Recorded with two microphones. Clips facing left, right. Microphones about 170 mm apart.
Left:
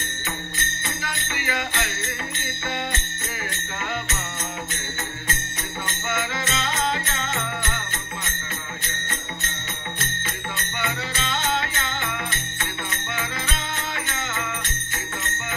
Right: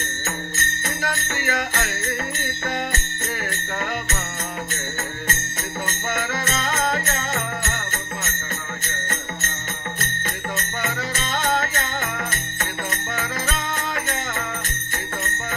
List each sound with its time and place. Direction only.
0.2 s music: 45° right (ahead or behind)
5.9 s music: 45° right (ahead or behind)
8.8 s jingle bell: 45° right (ahead or behind)
9.9 s music: 45° right (ahead or behind)